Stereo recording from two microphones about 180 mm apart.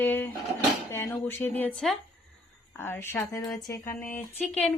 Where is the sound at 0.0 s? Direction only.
10° left (ahead or behind).